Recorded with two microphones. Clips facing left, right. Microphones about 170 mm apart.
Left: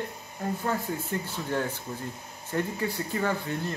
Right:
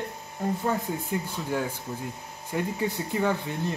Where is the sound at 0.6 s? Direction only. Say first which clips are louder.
Right 2 dB; 10° right (ahead or behind).